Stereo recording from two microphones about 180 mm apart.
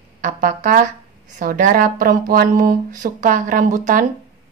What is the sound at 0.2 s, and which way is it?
Speech, 45° right (ahead or behind).